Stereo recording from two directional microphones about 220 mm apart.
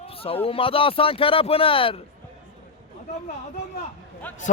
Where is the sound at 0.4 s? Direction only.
25° left (ahead or behind).